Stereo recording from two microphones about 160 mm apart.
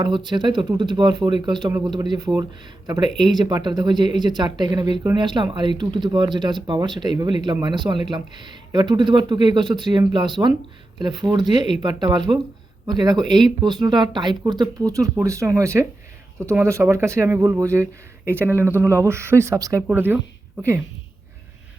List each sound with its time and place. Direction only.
0.3 s speech: 30° right (ahead or behind)
19.9 s a woman's voice: 10° right (ahead or behind)